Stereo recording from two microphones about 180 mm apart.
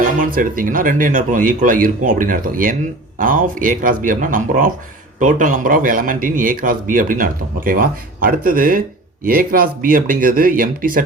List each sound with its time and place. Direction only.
0.2 s a man's voice: 50° right (ahead or behind)